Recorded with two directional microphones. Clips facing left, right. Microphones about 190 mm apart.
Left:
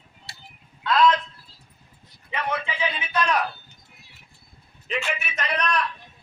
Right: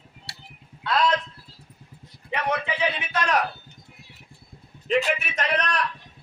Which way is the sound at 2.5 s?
65° right (ahead or behind).